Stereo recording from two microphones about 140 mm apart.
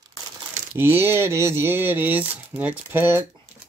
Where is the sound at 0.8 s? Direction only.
15° right (ahead or behind).